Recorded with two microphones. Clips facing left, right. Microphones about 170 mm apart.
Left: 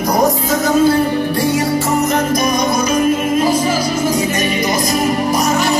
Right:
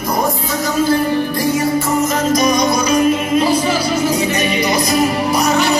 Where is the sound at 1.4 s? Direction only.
75° left (ahead or behind).